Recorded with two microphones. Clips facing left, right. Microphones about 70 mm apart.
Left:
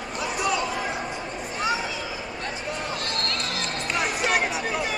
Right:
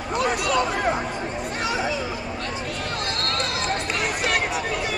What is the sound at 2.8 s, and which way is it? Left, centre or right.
Run, right.